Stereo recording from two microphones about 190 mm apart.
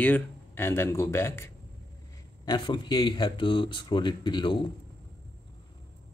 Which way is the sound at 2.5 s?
25° left (ahead or behind).